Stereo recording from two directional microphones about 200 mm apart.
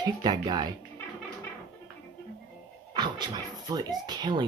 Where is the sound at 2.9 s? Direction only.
20° right (ahead or behind).